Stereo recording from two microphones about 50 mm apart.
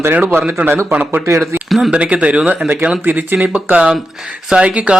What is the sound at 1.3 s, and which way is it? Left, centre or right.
Speech, right.